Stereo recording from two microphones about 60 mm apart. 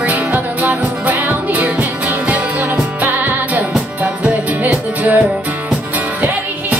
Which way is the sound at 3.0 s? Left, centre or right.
Right.